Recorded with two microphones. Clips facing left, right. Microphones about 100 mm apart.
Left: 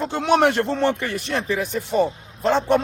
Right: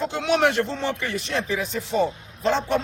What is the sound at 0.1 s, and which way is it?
Speech, 55° left (ahead or behind).